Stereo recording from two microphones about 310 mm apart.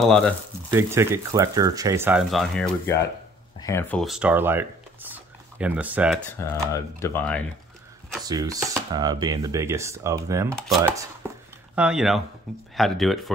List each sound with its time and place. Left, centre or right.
0.0 s speech: centre
6.7 s speech: centre
8.3 s speech: centre